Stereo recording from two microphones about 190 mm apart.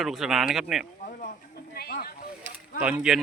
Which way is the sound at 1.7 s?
55° left (ahead or behind).